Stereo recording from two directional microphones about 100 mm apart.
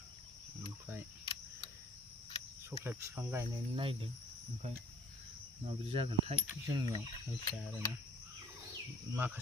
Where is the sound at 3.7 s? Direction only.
60° right (ahead or behind).